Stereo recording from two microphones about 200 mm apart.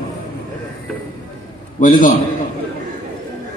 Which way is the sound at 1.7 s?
40° left (ahead or behind).